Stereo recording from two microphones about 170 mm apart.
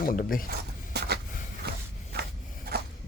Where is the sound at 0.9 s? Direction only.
75° right (ahead or behind).